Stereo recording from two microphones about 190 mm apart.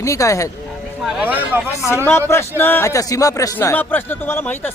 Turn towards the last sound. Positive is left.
turn(degrees=10)  # may be behind; listen again after turning